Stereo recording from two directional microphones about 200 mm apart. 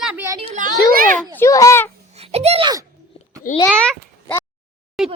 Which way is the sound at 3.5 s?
45° left (ahead or behind).